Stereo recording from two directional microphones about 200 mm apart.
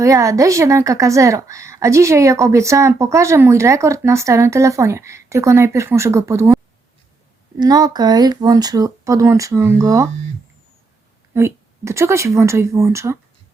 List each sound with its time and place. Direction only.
0.0 s a woman's voice: 15° right (ahead or behind)
7.6 s a woman's voice: 20° right (ahead or behind)
11.3 s a woman's voice: 15° right (ahead or behind)